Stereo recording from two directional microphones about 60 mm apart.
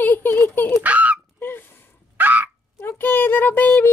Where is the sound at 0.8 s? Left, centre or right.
Right.